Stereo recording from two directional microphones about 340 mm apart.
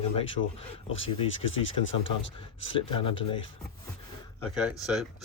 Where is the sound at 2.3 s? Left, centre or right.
Centre.